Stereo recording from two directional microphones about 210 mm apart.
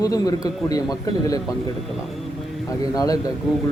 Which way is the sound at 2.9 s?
15° left (ahead or behind).